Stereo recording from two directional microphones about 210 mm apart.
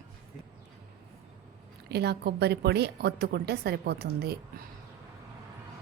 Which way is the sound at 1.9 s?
50° right (ahead or behind).